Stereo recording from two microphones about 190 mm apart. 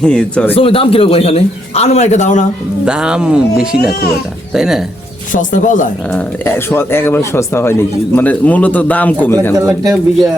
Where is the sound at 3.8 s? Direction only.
55° left (ahead or behind).